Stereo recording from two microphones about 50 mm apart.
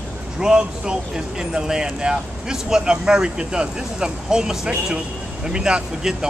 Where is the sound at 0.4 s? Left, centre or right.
Centre.